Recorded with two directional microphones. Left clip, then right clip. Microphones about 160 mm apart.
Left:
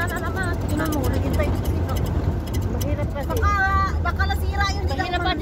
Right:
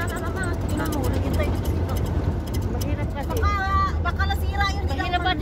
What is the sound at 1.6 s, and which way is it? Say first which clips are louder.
Vehicle: left 1 dB; 40° left (ahead or behind).